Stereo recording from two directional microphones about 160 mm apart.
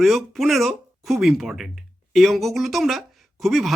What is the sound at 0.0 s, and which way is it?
Speech, centre (ahead or behind).